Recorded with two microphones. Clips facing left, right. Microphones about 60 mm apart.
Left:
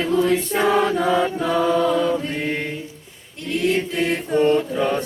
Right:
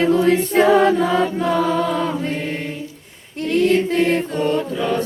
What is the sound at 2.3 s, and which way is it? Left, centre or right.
Choir, left.